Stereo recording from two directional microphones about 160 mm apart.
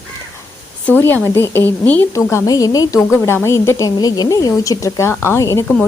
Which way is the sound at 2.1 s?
20° left (ahead or behind).